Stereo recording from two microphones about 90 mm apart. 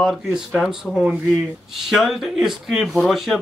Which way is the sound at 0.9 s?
15° left (ahead or behind).